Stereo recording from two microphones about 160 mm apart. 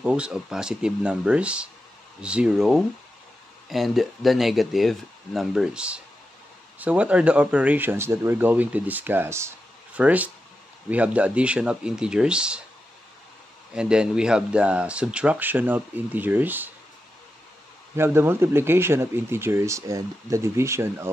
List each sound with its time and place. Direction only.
0.0 s speech: 5° right (ahead or behind)
13.7 s speech: 5° right (ahead or behind)
17.9 s speech: 15° right (ahead or behind)